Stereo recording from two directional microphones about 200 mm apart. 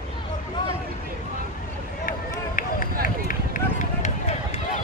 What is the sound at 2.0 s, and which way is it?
Run, 40° left (ahead or behind).